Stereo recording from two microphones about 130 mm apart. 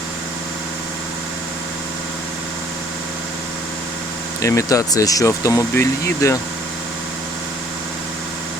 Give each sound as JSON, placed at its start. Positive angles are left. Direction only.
{"t": 4.4, "sound": "speech", "side_deg": 25}